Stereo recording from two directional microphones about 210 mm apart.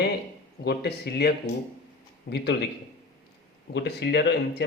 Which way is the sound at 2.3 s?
50° left (ahead or behind).